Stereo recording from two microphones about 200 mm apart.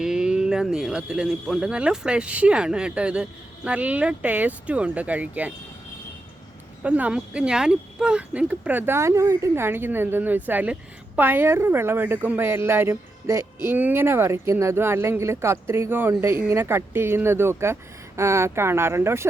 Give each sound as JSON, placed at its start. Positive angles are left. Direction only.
{"t": 0.0, "sound": "speech", "side_deg": -5}
{"t": 6.8, "sound": "speech", "side_deg": -5}